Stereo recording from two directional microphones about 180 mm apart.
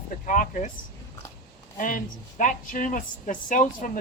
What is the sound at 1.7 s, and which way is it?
A woman's voice, 45° left (ahead or behind).